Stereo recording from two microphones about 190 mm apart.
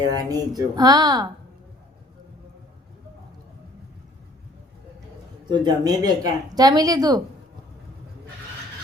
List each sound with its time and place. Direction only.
0.0 s speech: 20° right (ahead or behind)
5.5 s speech: 20° right (ahead or behind)